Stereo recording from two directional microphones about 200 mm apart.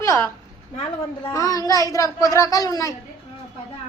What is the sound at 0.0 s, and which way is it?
A woman's voice, 15° left (ahead or behind).